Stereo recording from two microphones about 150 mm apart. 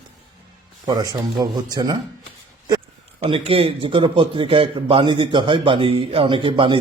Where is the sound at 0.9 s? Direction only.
25° right (ahead or behind).